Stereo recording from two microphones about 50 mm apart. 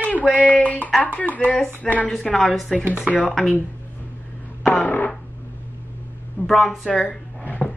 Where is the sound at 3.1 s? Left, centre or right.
Centre.